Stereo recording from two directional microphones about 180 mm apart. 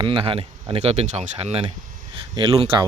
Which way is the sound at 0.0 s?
30° right (ahead or behind).